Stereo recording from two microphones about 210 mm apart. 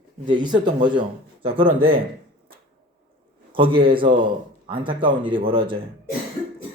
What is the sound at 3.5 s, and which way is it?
Speech, 25° right (ahead or behind).